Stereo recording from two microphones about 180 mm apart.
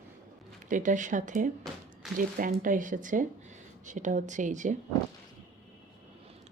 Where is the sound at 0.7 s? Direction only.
45° right (ahead or behind).